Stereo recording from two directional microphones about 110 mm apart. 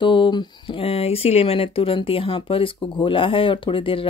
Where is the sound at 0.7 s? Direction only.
60° left (ahead or behind).